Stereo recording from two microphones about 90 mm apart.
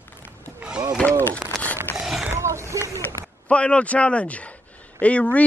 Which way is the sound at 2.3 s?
30° right (ahead or behind).